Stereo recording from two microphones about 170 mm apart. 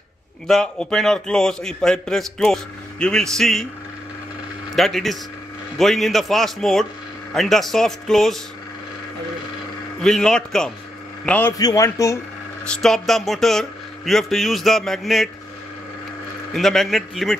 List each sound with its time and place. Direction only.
0.5 s a man's voice: 5° left (ahead or behind)
4.7 s a man's voice: centre (ahead or behind)
10.0 s a man's voice: 5° left (ahead or behind)
11.5 s a man's voice: 20° left (ahead or behind)
12.6 s a man's voice: 5° left (ahead or behind)
16.5 s a man's voice: centre (ahead or behind)